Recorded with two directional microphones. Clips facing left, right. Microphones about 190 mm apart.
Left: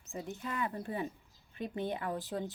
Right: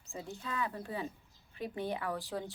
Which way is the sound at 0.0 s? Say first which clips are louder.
Left 2 dB; 20° left (ahead or behind).